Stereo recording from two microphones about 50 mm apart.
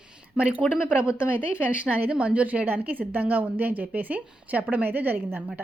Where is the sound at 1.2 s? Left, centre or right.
Left.